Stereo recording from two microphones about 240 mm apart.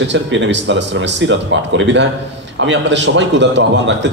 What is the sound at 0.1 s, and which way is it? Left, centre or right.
Speech, right.